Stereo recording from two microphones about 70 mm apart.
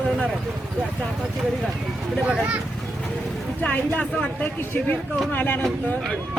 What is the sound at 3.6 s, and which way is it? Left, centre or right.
Speech, left.